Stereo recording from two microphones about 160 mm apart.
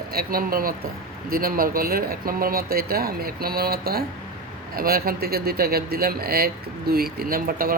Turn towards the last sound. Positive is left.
turn(degrees=-65)  # may be behind; listen again after turning